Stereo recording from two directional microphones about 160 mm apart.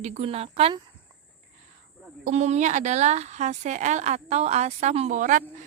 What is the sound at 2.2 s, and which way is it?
A woman's voice, 45° right (ahead or behind).